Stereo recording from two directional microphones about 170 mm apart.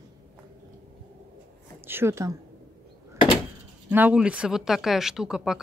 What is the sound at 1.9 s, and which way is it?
Speech, 15° right (ahead or behind).